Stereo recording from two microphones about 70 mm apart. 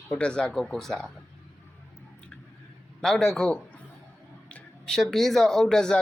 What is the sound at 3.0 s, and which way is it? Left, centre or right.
Speech, centre.